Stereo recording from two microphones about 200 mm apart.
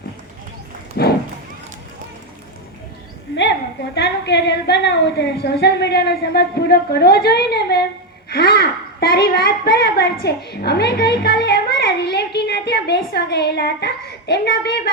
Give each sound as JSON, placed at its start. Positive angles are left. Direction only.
{"t": 1.0, "sound": "speech", "side_deg": 55}
{"t": 3.9, "sound": "a woman's voice", "side_deg": 60}